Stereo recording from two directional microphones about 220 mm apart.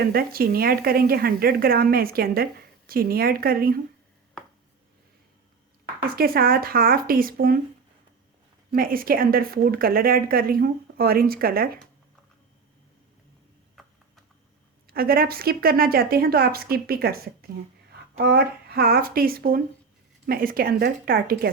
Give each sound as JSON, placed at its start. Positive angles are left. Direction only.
{"t": 0.0, "sound": "a woman's voice", "side_deg": -45}
{"t": 6.1, "sound": "a woman's voice", "side_deg": -45}
{"t": 8.7, "sound": "a woman's voice", "side_deg": -40}
{"t": 13.8, "sound": "a sound", "side_deg": 0}
{"t": 14.8, "sound": "a woman's voice", "side_deg": -40}